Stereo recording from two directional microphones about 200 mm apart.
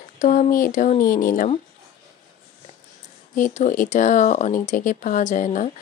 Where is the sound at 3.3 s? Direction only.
40° left (ahead or behind).